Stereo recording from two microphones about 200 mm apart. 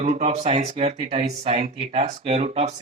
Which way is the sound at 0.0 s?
30° right (ahead or behind).